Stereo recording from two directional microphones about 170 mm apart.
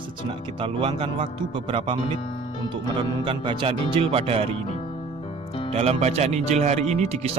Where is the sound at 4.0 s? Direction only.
35° right (ahead or behind).